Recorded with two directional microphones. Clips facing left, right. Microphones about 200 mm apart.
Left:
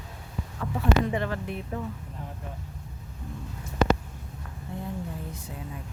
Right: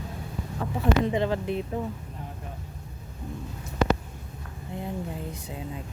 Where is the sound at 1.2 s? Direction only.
20° right (ahead or behind).